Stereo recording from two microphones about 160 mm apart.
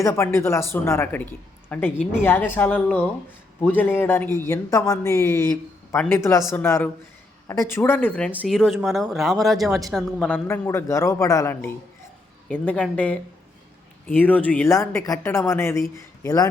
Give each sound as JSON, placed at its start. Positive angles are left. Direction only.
{"t": 0.0, "sound": "a woman's voice", "side_deg": 15}